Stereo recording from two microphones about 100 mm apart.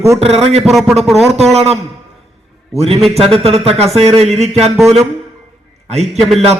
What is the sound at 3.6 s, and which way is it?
Speech, 90° right.